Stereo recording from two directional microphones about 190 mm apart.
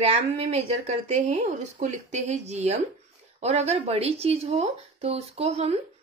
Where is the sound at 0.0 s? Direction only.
35° right (ahead or behind).